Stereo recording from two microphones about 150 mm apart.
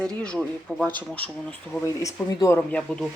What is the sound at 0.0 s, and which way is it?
Speech, 5° left (ahead or behind).